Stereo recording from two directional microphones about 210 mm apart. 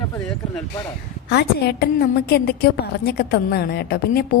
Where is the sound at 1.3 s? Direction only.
50° left (ahead or behind).